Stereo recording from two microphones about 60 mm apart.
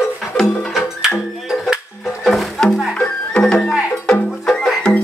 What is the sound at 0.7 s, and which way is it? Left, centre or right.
Music, centre.